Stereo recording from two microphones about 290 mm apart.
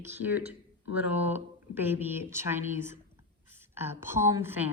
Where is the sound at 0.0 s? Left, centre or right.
Centre.